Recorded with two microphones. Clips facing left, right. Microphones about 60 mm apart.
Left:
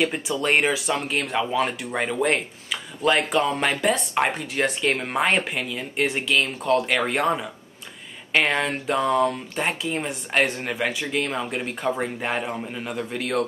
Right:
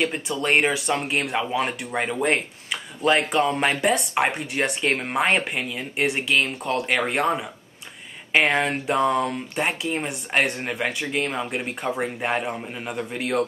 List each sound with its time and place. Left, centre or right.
0.0 s speech: centre